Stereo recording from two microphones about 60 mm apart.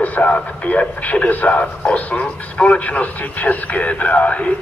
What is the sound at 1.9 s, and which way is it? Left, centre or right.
Speech, left.